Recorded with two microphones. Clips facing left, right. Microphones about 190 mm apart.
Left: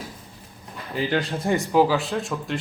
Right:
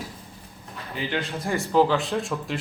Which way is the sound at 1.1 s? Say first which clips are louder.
Left 4 dB; 35° left (ahead or behind).